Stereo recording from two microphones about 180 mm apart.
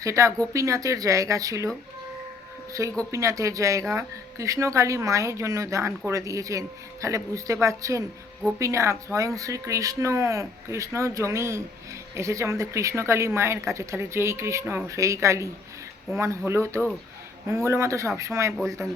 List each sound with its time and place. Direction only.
0.0 s speech: 15° right (ahead or behind)
3.1 s speech: 15° right (ahead or behind)